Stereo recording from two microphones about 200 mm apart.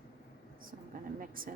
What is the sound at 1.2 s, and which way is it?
Speech, 45° right (ahead or behind).